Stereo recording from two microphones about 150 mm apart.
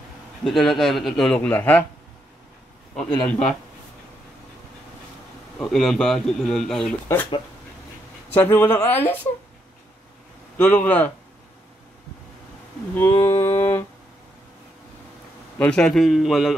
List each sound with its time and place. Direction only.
0.4 s a man's voice: centre (ahead or behind)
3.0 s a man's voice: 5° left (ahead or behind)
5.6 s a man's voice: 5° left (ahead or behind)
8.3 s speech: 15° left (ahead or behind)
10.6 s speech: 10° left (ahead or behind)
12.9 s a sound: 15° left (ahead or behind)
15.6 s a man's voice: 5° left (ahead or behind)